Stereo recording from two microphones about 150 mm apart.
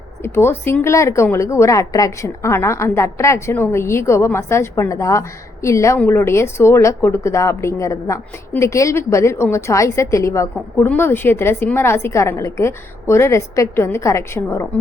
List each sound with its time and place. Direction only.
0.2 s speech: 15° left (ahead or behind)